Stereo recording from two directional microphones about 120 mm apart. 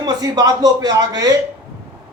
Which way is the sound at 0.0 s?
30° right (ahead or behind).